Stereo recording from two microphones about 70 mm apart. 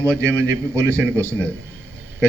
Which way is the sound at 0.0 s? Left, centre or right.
Right.